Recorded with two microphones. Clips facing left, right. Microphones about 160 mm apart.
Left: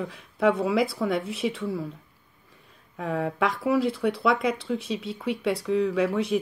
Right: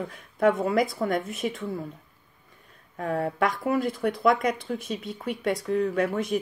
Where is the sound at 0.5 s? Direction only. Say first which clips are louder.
Even; 5° left (ahead or behind).